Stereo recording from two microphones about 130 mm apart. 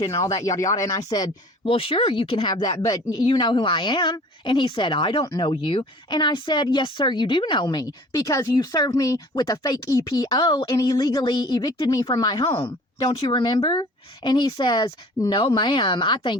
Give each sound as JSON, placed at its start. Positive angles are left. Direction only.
{"t": 0.2, "sound": "speech", "side_deg": 25}
{"t": 1.6, "sound": "speech", "side_deg": 45}